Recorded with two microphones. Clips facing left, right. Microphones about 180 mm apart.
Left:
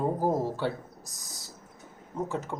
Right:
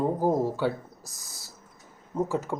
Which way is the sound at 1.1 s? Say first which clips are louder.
Left 2 dB; 15° left (ahead or behind).